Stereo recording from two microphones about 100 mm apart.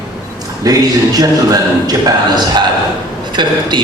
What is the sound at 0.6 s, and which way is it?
A man's voice, 35° right (ahead or behind).